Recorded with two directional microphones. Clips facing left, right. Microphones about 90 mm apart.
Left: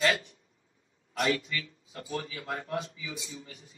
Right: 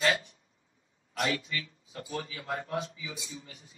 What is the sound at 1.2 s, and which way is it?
Speech, 35° right (ahead or behind).